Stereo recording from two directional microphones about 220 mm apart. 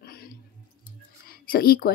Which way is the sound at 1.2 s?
40° left (ahead or behind).